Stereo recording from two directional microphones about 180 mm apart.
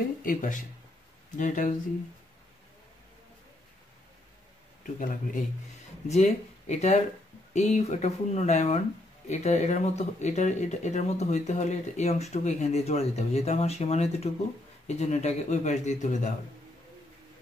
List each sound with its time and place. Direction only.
0.2 s speech: 45° left (ahead or behind)
5.0 s speech: 45° left (ahead or behind)